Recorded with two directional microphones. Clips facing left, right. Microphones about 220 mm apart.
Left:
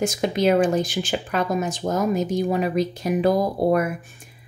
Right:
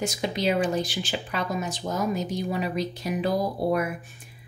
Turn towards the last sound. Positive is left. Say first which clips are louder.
# left 5 dB
turn(degrees=50)  # may be behind; listen again after turning